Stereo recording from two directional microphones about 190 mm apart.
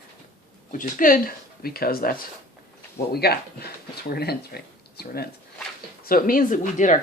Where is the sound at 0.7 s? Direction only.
45° left (ahead or behind).